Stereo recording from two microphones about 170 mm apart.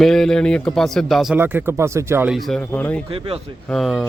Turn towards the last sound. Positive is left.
turn(degrees=0)  # may be behind; listen again after turning